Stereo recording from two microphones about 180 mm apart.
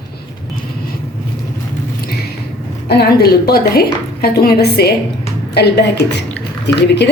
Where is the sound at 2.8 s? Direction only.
60° left (ahead or behind).